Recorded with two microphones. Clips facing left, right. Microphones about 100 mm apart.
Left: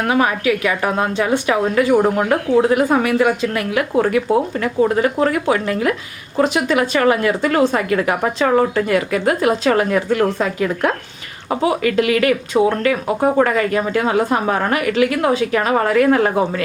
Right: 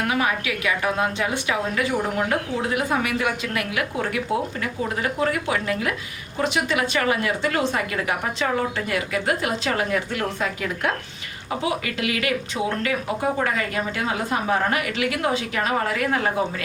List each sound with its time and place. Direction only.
0.1 s a woman's voice: 40° left (ahead or behind)
1.9 s a woman's voice: 60° left (ahead or behind); by 10.2 s 45° left (ahead or behind)
11.4 s a woman's voice: 50° left (ahead or behind)